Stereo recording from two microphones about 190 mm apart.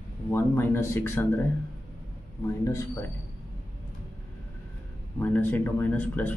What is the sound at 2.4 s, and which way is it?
Speech, 15° left (ahead or behind).